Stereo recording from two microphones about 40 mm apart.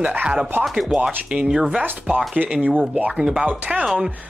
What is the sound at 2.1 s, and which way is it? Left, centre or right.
Speech, right.